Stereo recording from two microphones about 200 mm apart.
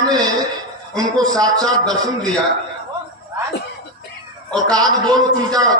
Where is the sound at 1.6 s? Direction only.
5° left (ahead or behind).